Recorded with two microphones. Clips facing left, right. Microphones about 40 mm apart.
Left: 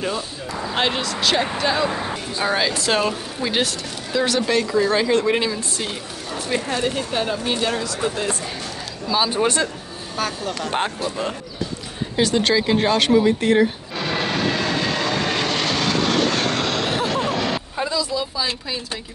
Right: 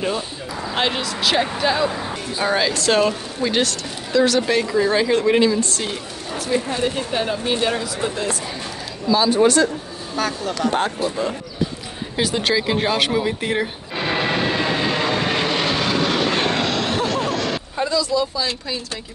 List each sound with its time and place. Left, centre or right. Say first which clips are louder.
0.7 s speech: even; centre
6.8 s speech: right 1 dB; centre
9.0 s speech: right 4 dB; centre
10.1 s speech: right 2 dB; centre
12.2 s speech: left 2 dB; centre
13.9 s vehicle: right 5 dB; centre
16.6 s a sound: right 1 dB; centre